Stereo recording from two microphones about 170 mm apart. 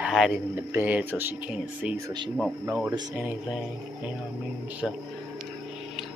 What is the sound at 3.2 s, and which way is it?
Speech, 5° right (ahead or behind).